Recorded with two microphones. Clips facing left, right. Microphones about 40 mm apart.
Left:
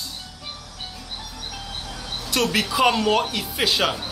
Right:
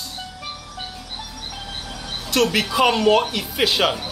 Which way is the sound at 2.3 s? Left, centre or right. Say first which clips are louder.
Right 3 dB; centre.